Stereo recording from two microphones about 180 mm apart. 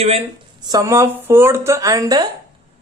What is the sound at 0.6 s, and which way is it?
Speech, 20° right (ahead or behind).